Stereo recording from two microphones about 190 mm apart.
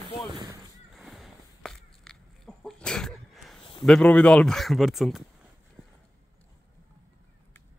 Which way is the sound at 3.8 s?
5° left (ahead or behind).